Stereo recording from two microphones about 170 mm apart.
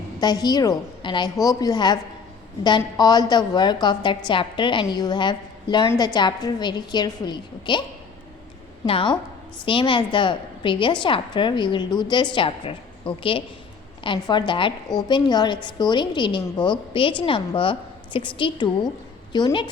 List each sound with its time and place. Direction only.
0.2 s a woman's voice: 25° left (ahead or behind)
8.9 s a woman's voice: 30° left (ahead or behind)